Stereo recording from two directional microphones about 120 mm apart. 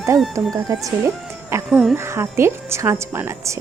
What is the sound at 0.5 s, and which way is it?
Speech, 30° right (ahead or behind).